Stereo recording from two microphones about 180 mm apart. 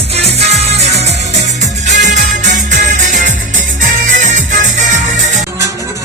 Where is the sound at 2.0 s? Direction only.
45° right (ahead or behind).